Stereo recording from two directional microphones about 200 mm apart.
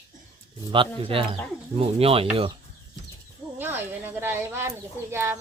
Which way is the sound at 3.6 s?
10° right (ahead or behind).